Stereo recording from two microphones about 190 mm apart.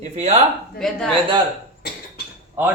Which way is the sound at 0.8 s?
5° left (ahead or behind).